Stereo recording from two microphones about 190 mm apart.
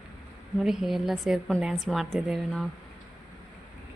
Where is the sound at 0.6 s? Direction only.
Centre (ahead or behind).